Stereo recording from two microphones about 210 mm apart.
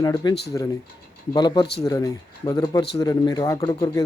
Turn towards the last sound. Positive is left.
turn(degrees=25)  # may be behind; listen again after turning